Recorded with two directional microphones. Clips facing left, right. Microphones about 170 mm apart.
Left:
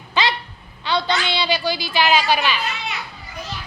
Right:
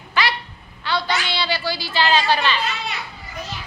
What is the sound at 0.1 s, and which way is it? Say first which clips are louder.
Babbling: left 1 dB; 20° left (ahead or behind).